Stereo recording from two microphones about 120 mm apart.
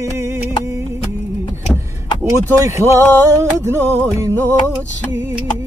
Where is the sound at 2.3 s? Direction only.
25° right (ahead or behind).